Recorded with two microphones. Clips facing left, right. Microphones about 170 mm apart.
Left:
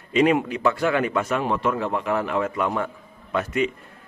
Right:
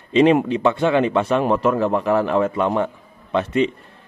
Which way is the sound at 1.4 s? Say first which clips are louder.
Right 6 dB; 40° right (ahead or behind).